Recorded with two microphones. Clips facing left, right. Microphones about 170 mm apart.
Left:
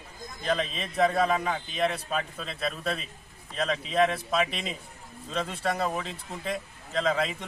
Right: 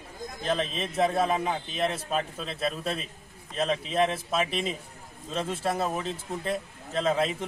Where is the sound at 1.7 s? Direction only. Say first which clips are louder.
Left 1 dB; centre (ahead or behind).